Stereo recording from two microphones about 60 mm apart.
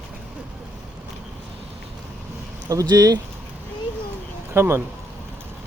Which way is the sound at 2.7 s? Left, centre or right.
Right.